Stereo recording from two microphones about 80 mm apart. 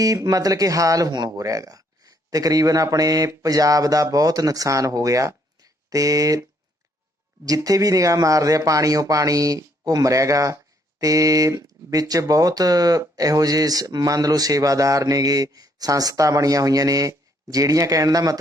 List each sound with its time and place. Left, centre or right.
0.0 s a man's voice: right
7.4 s speech: right